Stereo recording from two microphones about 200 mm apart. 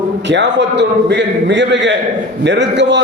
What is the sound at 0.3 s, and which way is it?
A man's voice, 60° right (ahead or behind).